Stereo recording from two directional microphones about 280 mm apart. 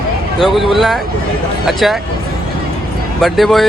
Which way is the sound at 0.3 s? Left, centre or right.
Centre.